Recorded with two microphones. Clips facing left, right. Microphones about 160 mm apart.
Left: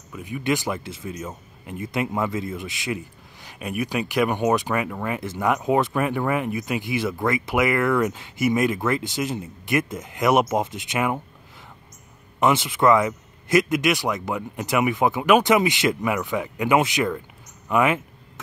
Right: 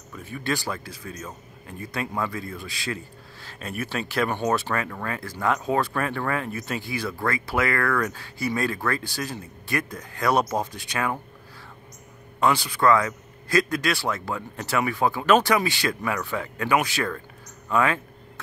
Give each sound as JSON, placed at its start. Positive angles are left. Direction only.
{"t": 0.1, "sound": "a man's voice", "side_deg": 15}
{"t": 12.4, "sound": "a man's voice", "side_deg": 20}